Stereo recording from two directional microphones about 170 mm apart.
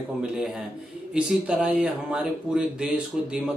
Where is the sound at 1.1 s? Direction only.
5° right (ahead or behind).